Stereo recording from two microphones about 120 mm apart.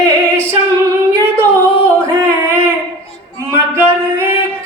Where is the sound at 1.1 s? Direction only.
20° right (ahead or behind).